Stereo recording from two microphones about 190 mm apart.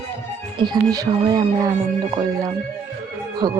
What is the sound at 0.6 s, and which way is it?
Speech, 20° right (ahead or behind).